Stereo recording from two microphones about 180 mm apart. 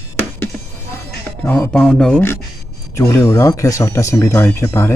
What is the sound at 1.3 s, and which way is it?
Speech, 5° left (ahead or behind).